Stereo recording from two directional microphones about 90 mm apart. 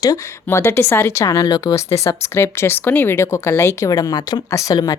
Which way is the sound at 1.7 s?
30° left (ahead or behind).